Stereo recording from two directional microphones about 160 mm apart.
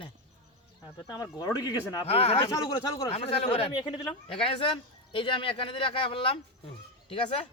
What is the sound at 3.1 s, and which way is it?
Speech, 35° left (ahead or behind).